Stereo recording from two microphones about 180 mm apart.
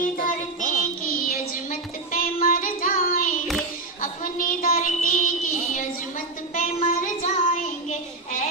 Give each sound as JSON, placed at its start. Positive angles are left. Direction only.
{"t": 0.0, "sound": "child singing", "side_deg": 50}